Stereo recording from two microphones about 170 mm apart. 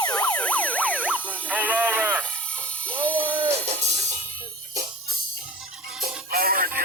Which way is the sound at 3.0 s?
10° left (ahead or behind).